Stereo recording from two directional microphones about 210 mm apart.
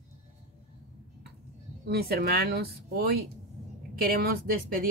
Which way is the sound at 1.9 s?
50° right (ahead or behind).